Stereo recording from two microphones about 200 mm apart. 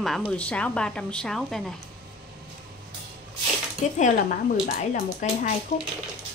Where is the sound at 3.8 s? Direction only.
35° left (ahead or behind).